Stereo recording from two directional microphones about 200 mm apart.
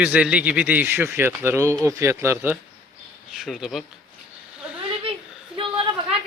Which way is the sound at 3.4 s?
Centre (ahead or behind).